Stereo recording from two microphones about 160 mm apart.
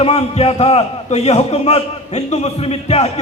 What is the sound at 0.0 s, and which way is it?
A man's voice, 40° left (ahead or behind).